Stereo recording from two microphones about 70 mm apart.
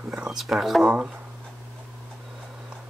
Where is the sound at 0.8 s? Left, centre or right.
Centre.